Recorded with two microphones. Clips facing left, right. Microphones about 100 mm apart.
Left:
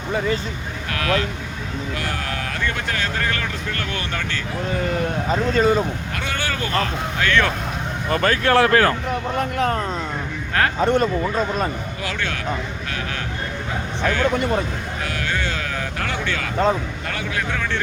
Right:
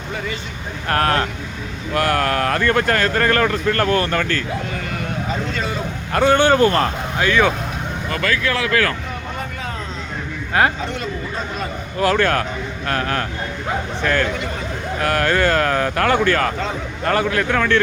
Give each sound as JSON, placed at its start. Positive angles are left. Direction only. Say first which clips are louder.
{"t": 0.9, "sound": "speech", "louder": "right 4 dB", "side_deg": -45}
{"t": 1.9, "sound": "speech", "louder": "right 12 dB", "side_deg": -60}
{"t": 5.3, "sound": "speech", "louder": "left 9 dB", "side_deg": 35}
{"t": 6.1, "sound": "speech", "louder": "right 16 dB", "side_deg": -30}
{"t": 8.1, "sound": "speech", "louder": "left 5 dB", "side_deg": 40}
{"t": 9.4, "sound": "vehicle", "louder": "left 7 dB", "side_deg": 70}
{"t": 10.8, "sound": "speech", "louder": "left 8 dB", "side_deg": 45}
{"t": 11.9, "sound": "speech", "louder": "right 10 dB", "side_deg": -50}